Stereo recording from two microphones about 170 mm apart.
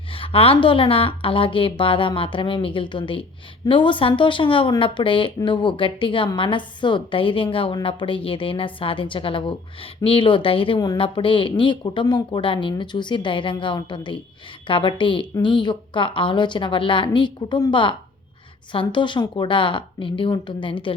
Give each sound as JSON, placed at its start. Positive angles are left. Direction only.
{"t": 0.1, "sound": "a woman's voice", "side_deg": 30}